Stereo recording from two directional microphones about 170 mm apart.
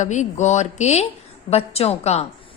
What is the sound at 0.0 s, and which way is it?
A woman's voice, 45° left (ahead or behind).